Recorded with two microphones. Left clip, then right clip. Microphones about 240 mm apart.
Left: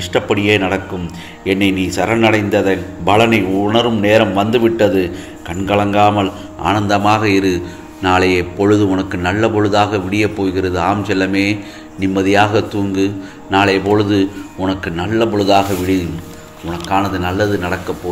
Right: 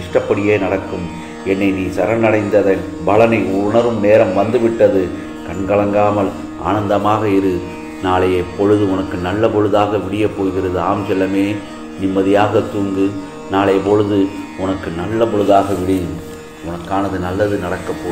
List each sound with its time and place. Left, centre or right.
0.1 s a man's voice: left
16.9 s speech: left